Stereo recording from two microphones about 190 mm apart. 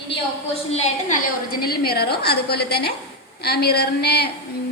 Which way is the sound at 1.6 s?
55° left (ahead or behind).